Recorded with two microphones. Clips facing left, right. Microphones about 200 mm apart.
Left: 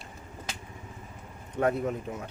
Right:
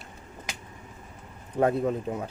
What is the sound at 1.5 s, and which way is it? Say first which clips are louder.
Speech: right 3 dB; 30° right (ahead or behind).